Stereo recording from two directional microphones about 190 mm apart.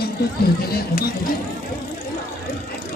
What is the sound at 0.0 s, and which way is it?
Speech, 55° left (ahead or behind).